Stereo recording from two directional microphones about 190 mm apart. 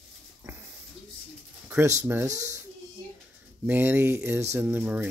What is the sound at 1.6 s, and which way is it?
Speech, 15° right (ahead or behind).